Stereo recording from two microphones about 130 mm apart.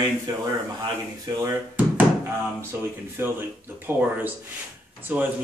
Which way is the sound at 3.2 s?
20° right (ahead or behind).